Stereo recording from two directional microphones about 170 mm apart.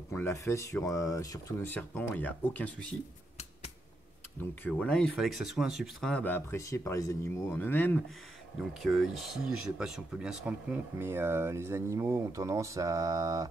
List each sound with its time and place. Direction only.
0.1 s speech: 15° left (ahead or behind)
4.4 s speech: 5° left (ahead or behind)
8.5 s speech: centre (ahead or behind); by 13.5 s 20° right (ahead or behind)